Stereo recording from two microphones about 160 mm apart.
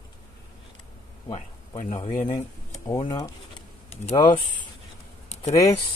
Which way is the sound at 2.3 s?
20° left (ahead or behind).